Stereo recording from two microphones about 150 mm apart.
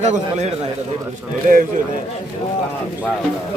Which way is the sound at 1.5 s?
65° right (ahead or behind).